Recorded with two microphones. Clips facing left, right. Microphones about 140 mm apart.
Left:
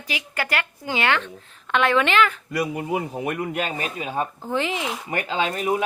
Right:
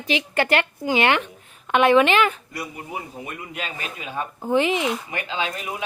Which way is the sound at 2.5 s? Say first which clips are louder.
Left 8 dB; 85° left.